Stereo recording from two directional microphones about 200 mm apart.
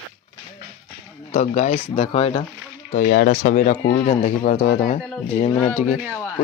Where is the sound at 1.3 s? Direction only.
35° left (ahead or behind).